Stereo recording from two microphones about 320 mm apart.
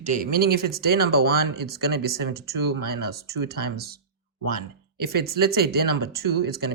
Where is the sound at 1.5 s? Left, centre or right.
Right.